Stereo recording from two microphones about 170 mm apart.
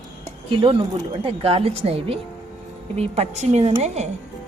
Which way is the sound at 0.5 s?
30° right (ahead or behind).